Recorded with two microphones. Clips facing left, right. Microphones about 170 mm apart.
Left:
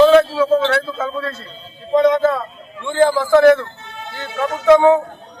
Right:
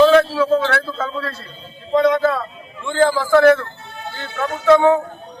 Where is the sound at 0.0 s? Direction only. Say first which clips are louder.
Left 2 dB; 20° left (ahead or behind).